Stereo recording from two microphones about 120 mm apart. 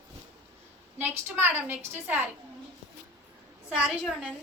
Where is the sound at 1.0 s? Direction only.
20° right (ahead or behind).